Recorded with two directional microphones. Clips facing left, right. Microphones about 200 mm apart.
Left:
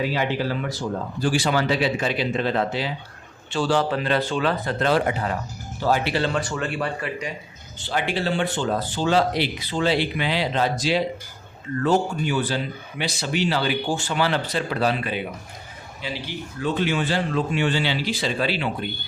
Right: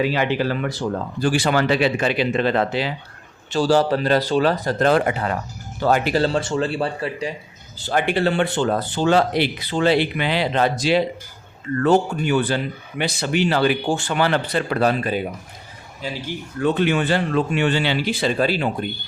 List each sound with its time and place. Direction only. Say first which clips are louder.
0.1 s speech: right 3 dB; 70° right (ahead or behind)
3.5 s speech: right 4 dB; 40° right (ahead or behind)
6.1 s speech: right 4 dB; 40° right (ahead or behind)
7.9 s speech: right 5 dB; 55° right (ahead or behind)